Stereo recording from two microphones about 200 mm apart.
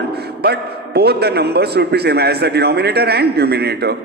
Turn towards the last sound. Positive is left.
turn(degrees=-55)  # may be behind; listen again after turning